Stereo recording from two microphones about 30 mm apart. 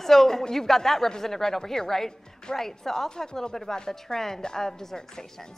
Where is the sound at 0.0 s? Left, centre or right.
Centre.